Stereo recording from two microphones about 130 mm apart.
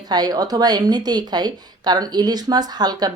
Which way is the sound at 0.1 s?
30° right (ahead or behind).